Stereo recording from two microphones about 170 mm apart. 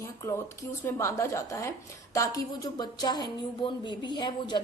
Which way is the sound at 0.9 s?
15° left (ahead or behind).